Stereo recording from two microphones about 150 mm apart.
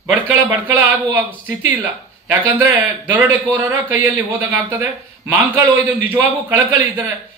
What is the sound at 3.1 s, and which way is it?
A man's voice, 15° right (ahead or behind).